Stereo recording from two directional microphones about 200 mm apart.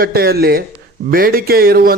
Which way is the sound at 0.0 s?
50° right (ahead or behind).